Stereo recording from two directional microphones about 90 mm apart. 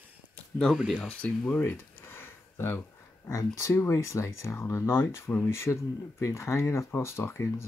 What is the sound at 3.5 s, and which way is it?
Speech, 35° left (ahead or behind).